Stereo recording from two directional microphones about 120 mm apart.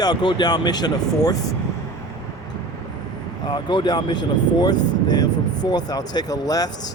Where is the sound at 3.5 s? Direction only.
40° left (ahead or behind).